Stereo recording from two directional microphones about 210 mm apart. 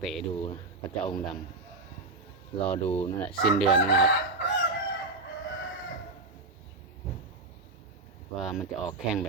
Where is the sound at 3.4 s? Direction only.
Centre (ahead or behind).